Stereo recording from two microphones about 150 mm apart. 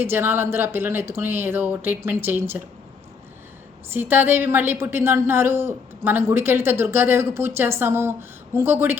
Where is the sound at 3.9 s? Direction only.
15° right (ahead or behind).